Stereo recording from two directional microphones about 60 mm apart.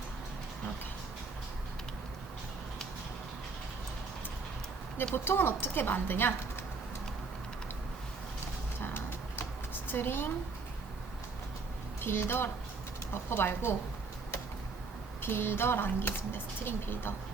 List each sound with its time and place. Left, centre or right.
5.1 s speech: left
8.8 s a sound: left
11.9 s speech: left
15.2 s speech: left